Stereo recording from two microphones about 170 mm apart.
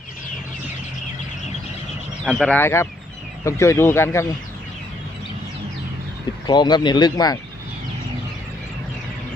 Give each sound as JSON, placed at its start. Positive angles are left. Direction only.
{"t": 2.2, "sound": "speech", "side_deg": 5}
{"t": 6.5, "sound": "speech", "side_deg": 25}